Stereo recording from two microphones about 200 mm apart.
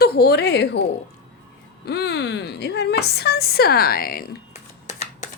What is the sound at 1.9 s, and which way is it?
Speech, 55° left (ahead or behind).